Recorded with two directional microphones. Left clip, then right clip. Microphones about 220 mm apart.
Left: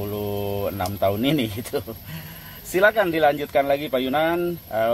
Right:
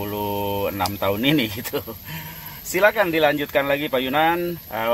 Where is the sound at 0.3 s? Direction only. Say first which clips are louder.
Right 4 dB; 35° right (ahead or behind).